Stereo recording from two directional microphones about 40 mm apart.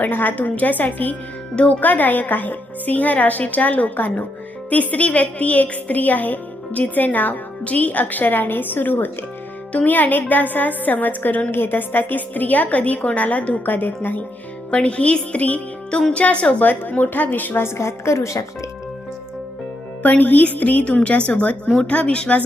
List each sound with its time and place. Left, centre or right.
0.0 s speech: left
0.3 s a woman's voice: left
1.5 s speech: left
1.8 s a woman's voice: left
4.7 s a woman's voice: left
7.6 s a woman's voice: left
11.5 s a woman's voice: left
13.7 s a woman's voice: left
14.7 s speech: left
15.9 s speech: centre
16.1 s speech: left
16.9 s a woman's voice: left
18.1 s speech: left
20.0 s a woman's voice: left